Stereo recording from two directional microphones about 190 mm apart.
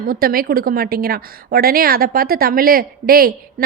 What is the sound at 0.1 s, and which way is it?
A woman's voice, 50° right (ahead or behind).